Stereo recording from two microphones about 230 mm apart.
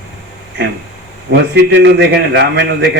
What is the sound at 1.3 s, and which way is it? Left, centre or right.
A man's voice, right.